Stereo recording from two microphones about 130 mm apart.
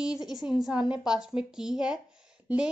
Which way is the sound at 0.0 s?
5° right (ahead or behind).